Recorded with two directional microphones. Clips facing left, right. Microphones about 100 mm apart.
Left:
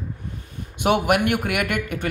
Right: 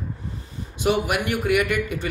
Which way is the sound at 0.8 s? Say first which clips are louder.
Left 3 dB; 60° left (ahead or behind).